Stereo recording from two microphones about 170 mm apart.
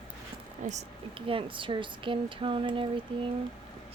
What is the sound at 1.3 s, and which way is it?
Speech, 30° right (ahead or behind).